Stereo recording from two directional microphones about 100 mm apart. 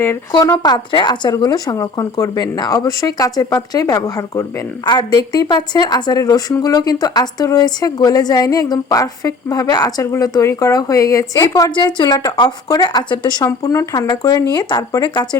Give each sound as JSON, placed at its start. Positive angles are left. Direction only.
{"t": 0.0, "sound": "speech", "side_deg": 25}
{"t": 0.6, "sound": "speech", "side_deg": 50}
{"t": 4.9, "sound": "speech", "side_deg": 45}
{"t": 11.8, "sound": "speech", "side_deg": 45}
{"t": 13.4, "sound": "speech", "side_deg": 35}